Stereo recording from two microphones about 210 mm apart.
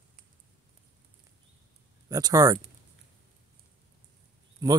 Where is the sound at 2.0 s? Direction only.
15° right (ahead or behind).